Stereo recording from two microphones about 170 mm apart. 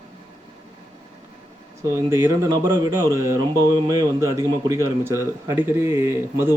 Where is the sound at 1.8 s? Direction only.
15° right (ahead or behind).